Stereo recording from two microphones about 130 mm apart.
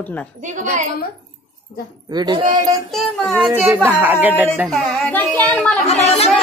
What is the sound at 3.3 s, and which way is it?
Speech, 15° right (ahead or behind).